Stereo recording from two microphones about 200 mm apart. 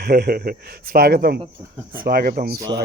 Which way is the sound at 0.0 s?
50° right (ahead or behind).